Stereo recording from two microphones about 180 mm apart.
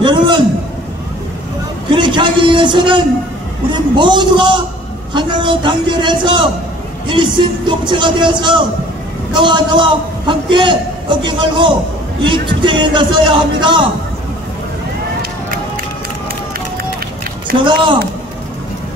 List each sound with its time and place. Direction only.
0.0 s a man's voice: 25° right (ahead or behind)
1.9 s a man's voice: 25° right (ahead or behind)